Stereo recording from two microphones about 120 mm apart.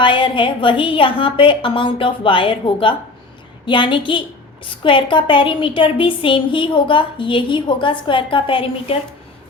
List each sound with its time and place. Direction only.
0.0 s a woman's voice: 40° left (ahead or behind)